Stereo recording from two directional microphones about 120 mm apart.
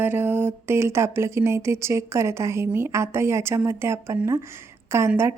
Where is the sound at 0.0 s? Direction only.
15° right (ahead or behind).